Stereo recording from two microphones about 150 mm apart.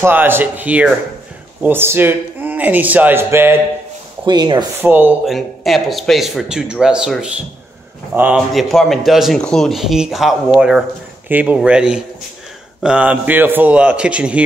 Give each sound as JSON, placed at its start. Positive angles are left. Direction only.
{"t": 0.0, "sound": "a man's voice", "side_deg": -15}
{"t": 4.3, "sound": "speech", "side_deg": -30}
{"t": 4.8, "sound": "a man's voice", "side_deg": -15}
{"t": 5.2, "sound": "a man's voice", "side_deg": 0}
{"t": 8.7, "sound": "a man's voice", "side_deg": 0}